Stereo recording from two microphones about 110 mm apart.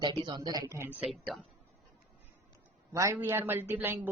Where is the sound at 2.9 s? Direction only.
30° right (ahead or behind).